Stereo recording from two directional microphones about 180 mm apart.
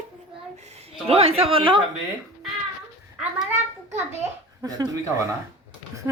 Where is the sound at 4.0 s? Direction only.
15° right (ahead or behind).